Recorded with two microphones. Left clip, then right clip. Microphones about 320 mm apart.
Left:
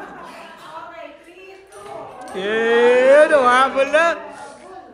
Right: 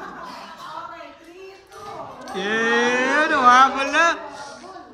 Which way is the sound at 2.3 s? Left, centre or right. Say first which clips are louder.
Left 3 dB; right.